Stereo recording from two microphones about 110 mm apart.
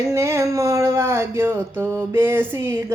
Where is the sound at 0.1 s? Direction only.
25° right (ahead or behind).